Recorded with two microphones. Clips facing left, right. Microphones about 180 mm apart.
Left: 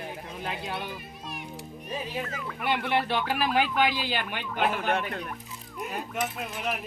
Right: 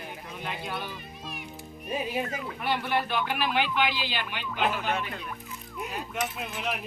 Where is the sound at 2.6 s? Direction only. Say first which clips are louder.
Left 2 dB; 20° left (ahead or behind); by 5.1 s 50° left (ahead or behind).